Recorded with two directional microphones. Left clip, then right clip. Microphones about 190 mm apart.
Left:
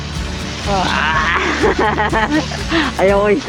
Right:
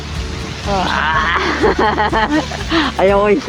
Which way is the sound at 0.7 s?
Centre (ahead or behind).